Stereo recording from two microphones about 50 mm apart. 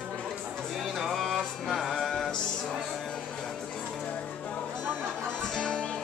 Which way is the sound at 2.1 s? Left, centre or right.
Centre.